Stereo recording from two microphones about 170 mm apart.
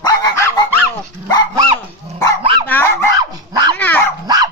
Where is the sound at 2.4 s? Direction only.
30° right (ahead or behind).